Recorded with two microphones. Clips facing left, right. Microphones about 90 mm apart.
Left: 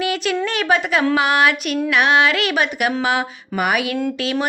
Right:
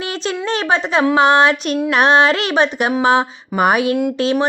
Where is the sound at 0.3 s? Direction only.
30° right (ahead or behind).